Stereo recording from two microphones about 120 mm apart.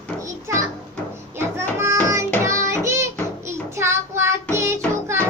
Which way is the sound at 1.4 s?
20° right (ahead or behind).